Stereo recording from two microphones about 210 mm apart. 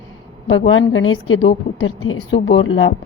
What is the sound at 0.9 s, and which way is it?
A woman's voice, 70° left (ahead or behind).